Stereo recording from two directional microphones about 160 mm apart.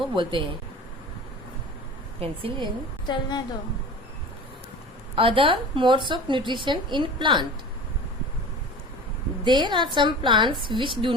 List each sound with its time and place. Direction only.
0.2 s a woman's voice: 30° right (ahead or behind)
2.2 s a woman's voice: 30° right (ahead or behind)
3.1 s a woman's voice: 25° left (ahead or behind)
5.1 s a woman's voice: 35° right (ahead or behind)
9.4 s a woman's voice: 30° right (ahead or behind)